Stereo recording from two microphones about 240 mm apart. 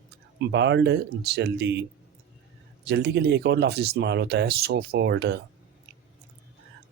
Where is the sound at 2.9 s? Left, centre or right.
Right.